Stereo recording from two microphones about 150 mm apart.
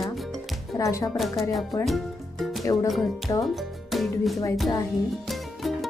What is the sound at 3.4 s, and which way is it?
Speech, centre (ahead or behind).